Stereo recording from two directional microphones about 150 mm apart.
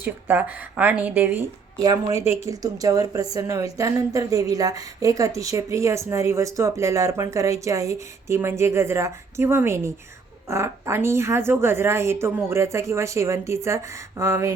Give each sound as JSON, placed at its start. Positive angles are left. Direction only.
{"t": 0.0, "sound": "a woman's voice", "side_deg": -10}
{"t": 1.8, "sound": "a woman's voice", "side_deg": -25}